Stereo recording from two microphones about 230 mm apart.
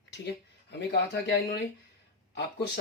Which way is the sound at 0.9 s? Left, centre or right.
Left.